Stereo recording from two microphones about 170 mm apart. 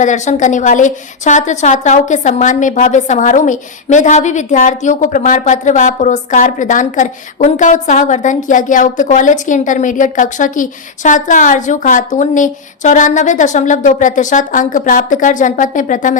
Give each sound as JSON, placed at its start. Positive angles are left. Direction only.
{"t": 0.0, "sound": "a woman's voice", "side_deg": 45}